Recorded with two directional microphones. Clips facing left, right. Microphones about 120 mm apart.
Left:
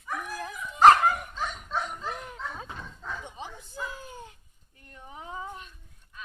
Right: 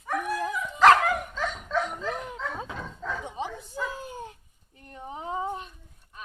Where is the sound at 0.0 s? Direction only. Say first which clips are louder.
Right 7 dB; 75° right (ahead or behind); by 2.5 s 90° right.